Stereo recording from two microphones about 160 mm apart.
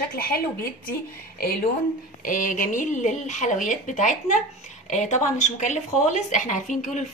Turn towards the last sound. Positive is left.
turn(degrees=50)  # may be behind; listen again after turning